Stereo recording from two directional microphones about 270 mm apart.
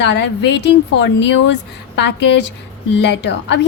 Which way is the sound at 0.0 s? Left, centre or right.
Left.